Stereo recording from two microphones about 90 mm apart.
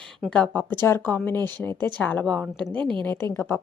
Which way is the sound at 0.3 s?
15° left (ahead or behind).